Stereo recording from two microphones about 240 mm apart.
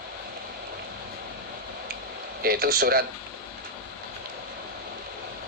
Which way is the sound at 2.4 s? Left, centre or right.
Right.